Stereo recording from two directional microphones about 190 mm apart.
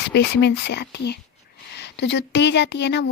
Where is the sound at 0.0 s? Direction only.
65° left (ahead or behind).